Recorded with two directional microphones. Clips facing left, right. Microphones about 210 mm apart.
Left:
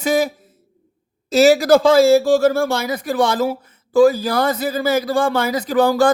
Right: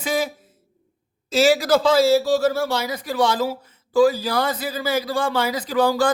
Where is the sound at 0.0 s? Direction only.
45° left (ahead or behind).